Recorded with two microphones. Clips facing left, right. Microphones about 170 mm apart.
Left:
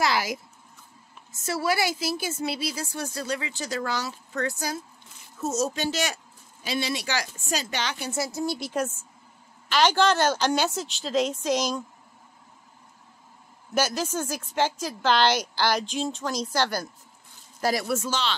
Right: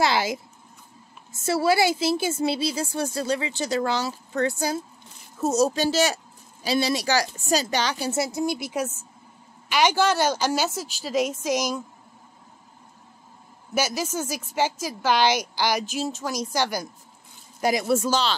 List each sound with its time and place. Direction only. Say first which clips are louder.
0.0 s speech: right 3 dB; 25° right (ahead or behind)
1.4 s a woman's voice: right 5 dB; 30° right (ahead or behind)
8.4 s a woman's voice: right 2 dB; 15° right (ahead or behind)
13.7 s a woman's voice: even; 10° right (ahead or behind)
17.9 s a woman's voice: right 5 dB; 40° right (ahead or behind)